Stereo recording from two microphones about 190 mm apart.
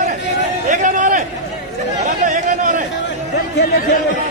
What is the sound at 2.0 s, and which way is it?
Chatter, 40° right (ahead or behind).